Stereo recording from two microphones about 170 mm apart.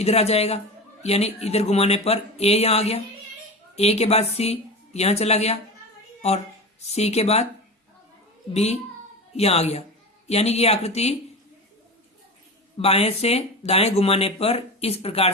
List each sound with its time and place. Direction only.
0.0 s speech: 40° left (ahead or behind)
6.8 s speech: 40° left (ahead or behind)
8.5 s speech: 40° left (ahead or behind)
12.7 s speech: 35° left (ahead or behind)